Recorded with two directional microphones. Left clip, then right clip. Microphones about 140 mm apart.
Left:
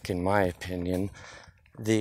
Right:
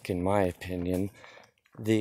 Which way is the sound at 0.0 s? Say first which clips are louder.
Left 1 dB; 15° right (ahead or behind).